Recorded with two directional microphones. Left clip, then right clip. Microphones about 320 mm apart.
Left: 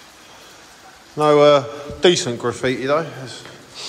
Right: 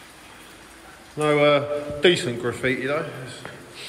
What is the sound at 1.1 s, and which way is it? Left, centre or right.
A man's voice, centre.